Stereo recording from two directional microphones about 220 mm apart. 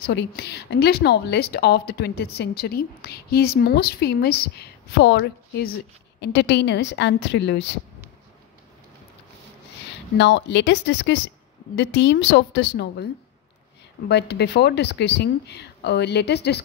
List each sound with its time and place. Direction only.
0.0 s a woman's voice: 50° left (ahead or behind)
10.1 s a woman's voice: 50° left (ahead or behind)